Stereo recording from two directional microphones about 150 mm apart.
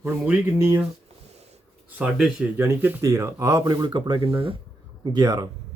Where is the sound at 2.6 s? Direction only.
20° right (ahead or behind); by 4.5 s 40° right (ahead or behind).